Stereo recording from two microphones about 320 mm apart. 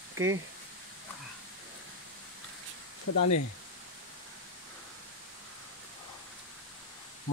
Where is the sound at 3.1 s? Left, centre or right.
Left.